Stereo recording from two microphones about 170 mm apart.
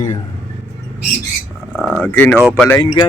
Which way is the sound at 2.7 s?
25° left (ahead or behind).